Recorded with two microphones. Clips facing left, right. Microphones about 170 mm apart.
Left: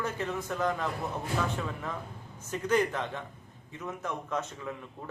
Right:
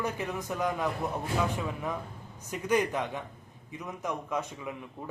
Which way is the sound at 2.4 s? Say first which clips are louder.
Even; 15° right (ahead or behind).